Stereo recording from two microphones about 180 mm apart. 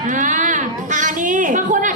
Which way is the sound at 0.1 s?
45° right (ahead or behind).